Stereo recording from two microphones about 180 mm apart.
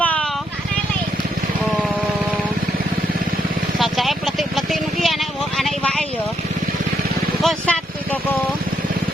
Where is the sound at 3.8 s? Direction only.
Centre (ahead or behind).